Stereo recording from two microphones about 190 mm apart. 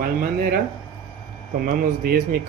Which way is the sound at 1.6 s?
50° right (ahead or behind).